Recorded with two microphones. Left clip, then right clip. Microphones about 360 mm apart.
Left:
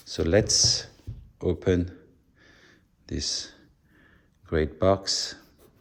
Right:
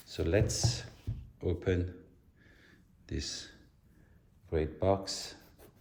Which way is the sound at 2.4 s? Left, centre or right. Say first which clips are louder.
Left 6 dB; centre.